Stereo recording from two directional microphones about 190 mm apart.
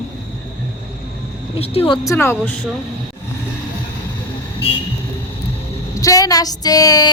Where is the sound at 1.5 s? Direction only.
30° left (ahead or behind).